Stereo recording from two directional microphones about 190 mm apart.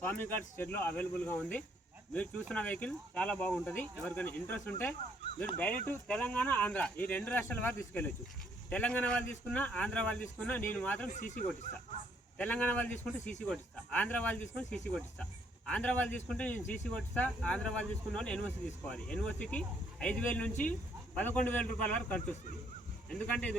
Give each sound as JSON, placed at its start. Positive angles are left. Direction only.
{"t": 0.0, "sound": "speech", "side_deg": 10}
{"t": 11.1, "sound": "speech", "side_deg": 45}
{"t": 12.4, "sound": "speech", "side_deg": 5}